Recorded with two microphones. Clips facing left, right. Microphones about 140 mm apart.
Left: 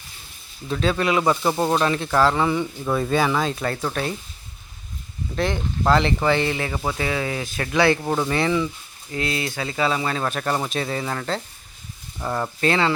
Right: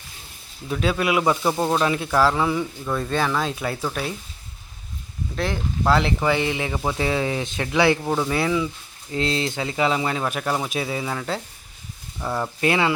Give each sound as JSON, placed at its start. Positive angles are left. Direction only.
{"t": 0.7, "sound": "speech", "side_deg": -5}
{"t": 5.4, "sound": "speech", "side_deg": 0}
{"t": 7.0, "sound": "speech", "side_deg": -25}
{"t": 8.0, "sound": "speech", "side_deg": 0}
{"t": 9.1, "sound": "speech", "side_deg": -25}
{"t": 12.5, "sound": "speech", "side_deg": -15}